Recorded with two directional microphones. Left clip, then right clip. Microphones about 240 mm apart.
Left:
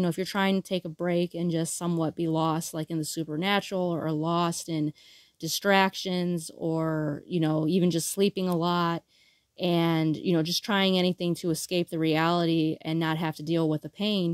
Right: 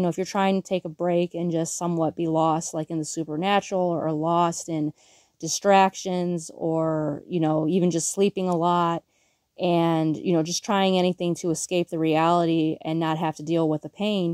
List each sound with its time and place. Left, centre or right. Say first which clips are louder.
0.0 s speech: right 4 dB; centre